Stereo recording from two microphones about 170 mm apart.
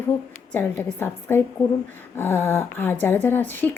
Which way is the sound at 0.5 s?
15° left (ahead or behind).